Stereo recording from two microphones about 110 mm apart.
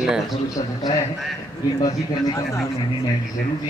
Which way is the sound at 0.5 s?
40° left (ahead or behind).